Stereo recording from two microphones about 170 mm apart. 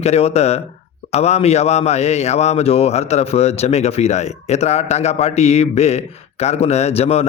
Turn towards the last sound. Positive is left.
turn(degrees=40)  # may be behind; listen again after turning